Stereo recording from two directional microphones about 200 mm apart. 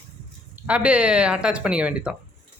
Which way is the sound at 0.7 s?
5° right (ahead or behind).